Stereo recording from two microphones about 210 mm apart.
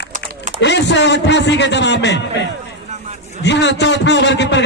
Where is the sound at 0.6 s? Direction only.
55° left (ahead or behind).